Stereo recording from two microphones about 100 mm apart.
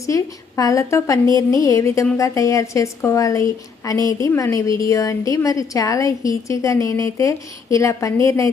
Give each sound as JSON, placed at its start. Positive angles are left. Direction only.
{"t": 0.0, "sound": "a woman's voice", "side_deg": 35}